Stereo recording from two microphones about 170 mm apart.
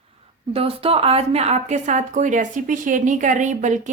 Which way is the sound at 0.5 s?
35° right (ahead or behind).